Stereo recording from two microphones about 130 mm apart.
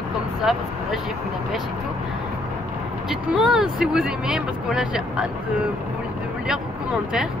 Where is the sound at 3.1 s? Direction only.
5° right (ahead or behind).